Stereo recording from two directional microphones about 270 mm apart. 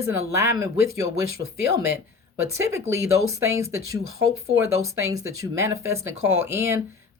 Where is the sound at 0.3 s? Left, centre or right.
Centre.